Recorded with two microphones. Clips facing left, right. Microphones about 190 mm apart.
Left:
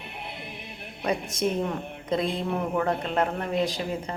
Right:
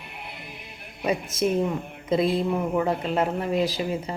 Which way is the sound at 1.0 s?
5° right (ahead or behind).